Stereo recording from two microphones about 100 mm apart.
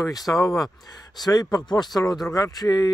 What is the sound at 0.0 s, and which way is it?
Speech, 40° left (ahead or behind).